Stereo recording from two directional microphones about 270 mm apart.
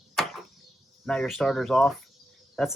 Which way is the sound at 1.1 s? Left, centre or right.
Centre.